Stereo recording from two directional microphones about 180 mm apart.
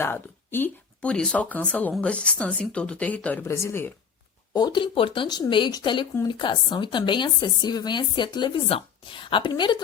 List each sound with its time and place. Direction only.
0.0 s speech: 10° left (ahead or behind)
4.5 s speech: 25° left (ahead or behind)